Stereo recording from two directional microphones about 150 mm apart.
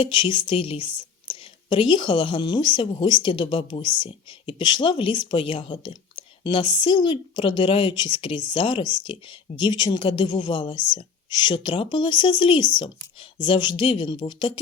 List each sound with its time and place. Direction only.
0.0 s a woman's voice: 35° left (ahead or behind)